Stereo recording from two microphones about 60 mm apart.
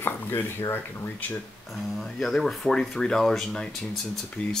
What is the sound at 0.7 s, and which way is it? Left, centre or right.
Speech, left.